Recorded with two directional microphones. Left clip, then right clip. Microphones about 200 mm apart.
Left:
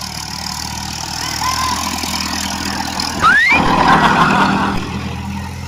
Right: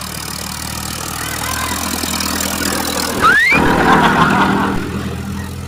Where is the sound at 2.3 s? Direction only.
30° right (ahead or behind).